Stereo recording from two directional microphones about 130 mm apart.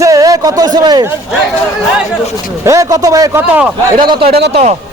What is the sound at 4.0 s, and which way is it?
Speech, 40° right (ahead or behind).